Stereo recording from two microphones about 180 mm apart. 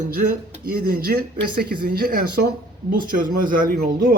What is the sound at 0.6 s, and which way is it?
Speech, 55° right (ahead or behind).